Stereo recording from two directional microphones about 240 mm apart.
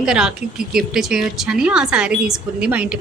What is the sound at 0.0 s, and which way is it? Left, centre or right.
A woman's voice, centre.